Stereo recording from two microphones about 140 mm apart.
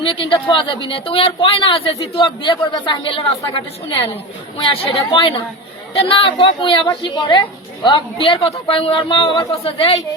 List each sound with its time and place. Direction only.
0.0 s speech: 40° left (ahead or behind)